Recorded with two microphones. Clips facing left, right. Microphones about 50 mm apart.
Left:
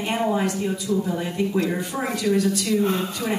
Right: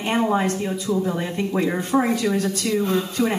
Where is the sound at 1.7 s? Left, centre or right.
Right.